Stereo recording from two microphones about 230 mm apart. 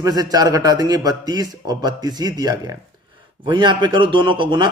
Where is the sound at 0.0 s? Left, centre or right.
Centre.